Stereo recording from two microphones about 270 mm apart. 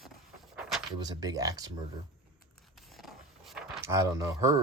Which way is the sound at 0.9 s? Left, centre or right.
Centre.